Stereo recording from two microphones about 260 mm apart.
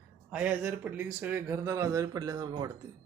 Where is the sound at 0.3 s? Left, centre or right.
Centre.